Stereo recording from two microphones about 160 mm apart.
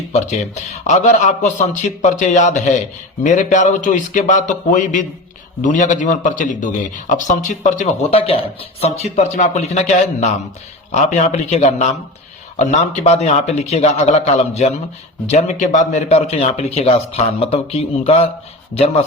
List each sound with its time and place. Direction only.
0.1 s a man's voice: 45° left (ahead or behind)